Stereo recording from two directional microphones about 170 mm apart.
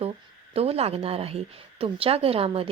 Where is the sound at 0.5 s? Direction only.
35° right (ahead or behind).